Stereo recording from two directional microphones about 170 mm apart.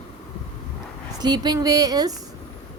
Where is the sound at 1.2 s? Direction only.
25° right (ahead or behind).